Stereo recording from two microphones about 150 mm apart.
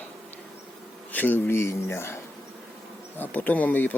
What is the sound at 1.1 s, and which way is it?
Speech, 15° left (ahead or behind).